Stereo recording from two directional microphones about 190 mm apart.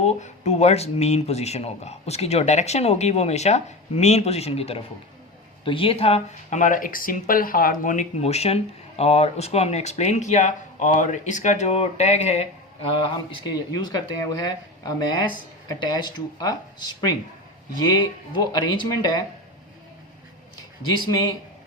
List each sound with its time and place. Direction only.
0.0 s speech: 35° left (ahead or behind)
13.0 s speech: 25° left (ahead or behind)